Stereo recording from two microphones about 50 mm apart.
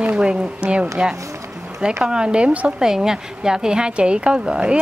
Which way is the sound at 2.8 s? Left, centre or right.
Centre.